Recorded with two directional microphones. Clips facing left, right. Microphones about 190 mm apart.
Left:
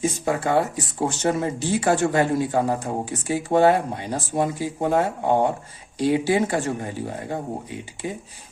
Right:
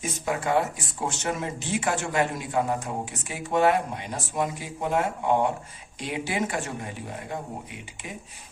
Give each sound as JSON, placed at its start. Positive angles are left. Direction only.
{"t": 0.0, "sound": "speech", "side_deg": 30}